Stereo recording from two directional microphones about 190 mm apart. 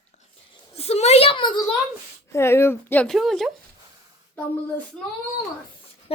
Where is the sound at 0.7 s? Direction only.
35° left (ahead or behind).